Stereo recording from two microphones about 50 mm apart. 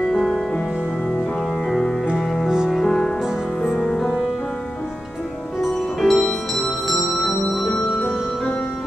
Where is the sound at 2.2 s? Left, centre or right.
Centre.